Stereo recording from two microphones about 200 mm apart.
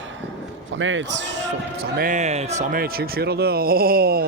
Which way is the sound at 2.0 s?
40° right (ahead or behind).